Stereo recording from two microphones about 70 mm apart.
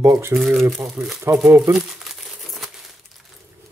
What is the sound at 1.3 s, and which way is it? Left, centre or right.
Speech, right.